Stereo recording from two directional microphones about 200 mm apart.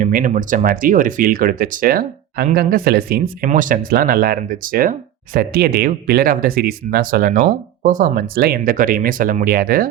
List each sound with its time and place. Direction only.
0.0 s speech: 40° right (ahead or behind)